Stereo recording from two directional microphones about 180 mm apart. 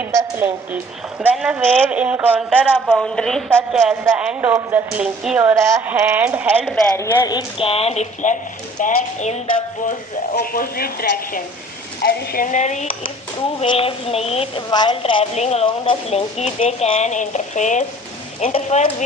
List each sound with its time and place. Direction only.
0.0 s a woman's voice: 15° right (ahead or behind)
6.9 s a woman's voice: 15° left (ahead or behind); by 9.4 s 40° left (ahead or behind)
10.3 s speech: 55° left (ahead or behind)
12.0 s a woman's voice: 55° left (ahead or behind); by 19.0 s 35° left (ahead or behind)